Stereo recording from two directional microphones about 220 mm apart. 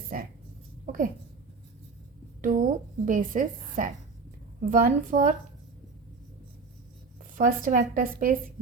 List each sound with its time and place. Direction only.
0.1 s a sound: 40° right (ahead or behind)
2.4 s a woman's voice: 35° right (ahead or behind)
7.3 s speech: 35° right (ahead or behind)